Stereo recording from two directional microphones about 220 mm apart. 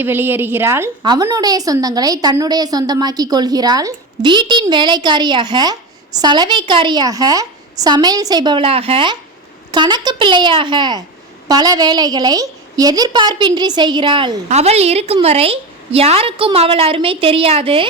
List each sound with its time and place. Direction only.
0.0 s a woman's voice: 10° right (ahead or behind); by 17.8 s 25° right (ahead or behind)